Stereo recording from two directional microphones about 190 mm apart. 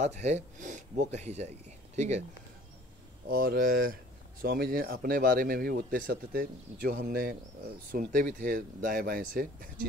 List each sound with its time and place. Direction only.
0.0 s speech: 35° right (ahead or behind)
3.3 s speech: 50° right (ahead or behind)